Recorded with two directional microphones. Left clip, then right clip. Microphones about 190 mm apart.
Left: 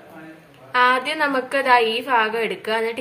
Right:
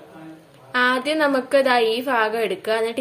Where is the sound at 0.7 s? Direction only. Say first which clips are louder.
Left 2 dB; 40° right (ahead or behind).